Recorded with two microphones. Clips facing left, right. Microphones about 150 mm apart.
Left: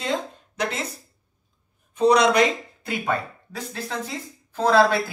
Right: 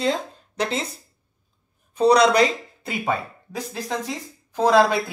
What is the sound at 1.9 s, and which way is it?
Speech, 35° right (ahead or behind).